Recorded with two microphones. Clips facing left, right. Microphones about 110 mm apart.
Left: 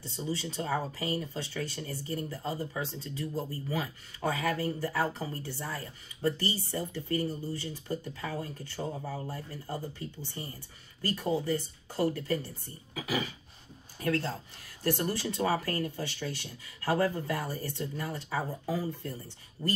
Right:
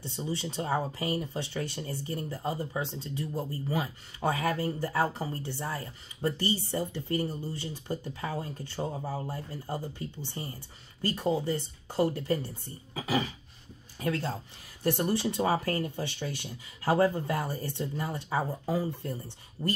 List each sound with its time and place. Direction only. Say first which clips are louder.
0.0 s speech: right 1 dB; 20° right (ahead or behind)
14.0 s speech: even; 15° right (ahead or behind)